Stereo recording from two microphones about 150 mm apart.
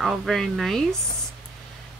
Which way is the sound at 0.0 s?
Centre (ahead or behind).